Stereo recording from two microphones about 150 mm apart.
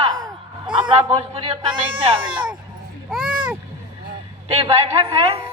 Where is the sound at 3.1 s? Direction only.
5° right (ahead or behind).